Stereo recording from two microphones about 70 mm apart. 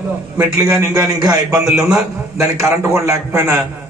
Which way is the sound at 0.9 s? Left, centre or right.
Right.